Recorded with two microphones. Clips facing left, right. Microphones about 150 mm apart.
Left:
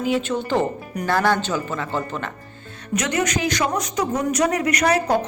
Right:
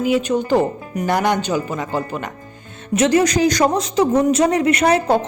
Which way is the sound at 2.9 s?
30° right (ahead or behind).